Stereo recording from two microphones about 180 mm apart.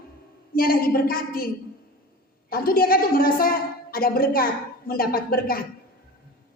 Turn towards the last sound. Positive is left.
turn(degrees=55)  # may be behind; listen again after turning